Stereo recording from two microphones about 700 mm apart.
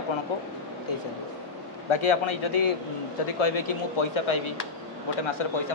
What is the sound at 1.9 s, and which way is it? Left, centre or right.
A man's voice, left.